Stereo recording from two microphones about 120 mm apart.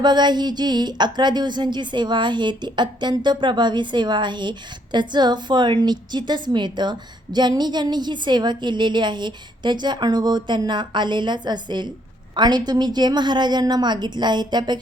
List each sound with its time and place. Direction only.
0.0 s a woman's voice: 40° right (ahead or behind)